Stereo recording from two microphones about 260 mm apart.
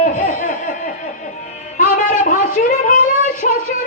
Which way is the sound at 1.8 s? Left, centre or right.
Left.